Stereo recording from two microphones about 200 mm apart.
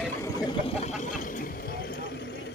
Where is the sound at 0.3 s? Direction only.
25° left (ahead or behind).